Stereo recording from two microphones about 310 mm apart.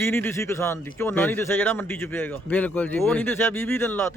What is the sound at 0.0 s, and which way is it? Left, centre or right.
A man's voice, centre.